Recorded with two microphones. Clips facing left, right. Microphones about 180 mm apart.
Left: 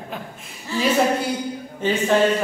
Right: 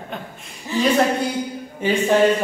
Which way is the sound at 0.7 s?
15° right (ahead or behind).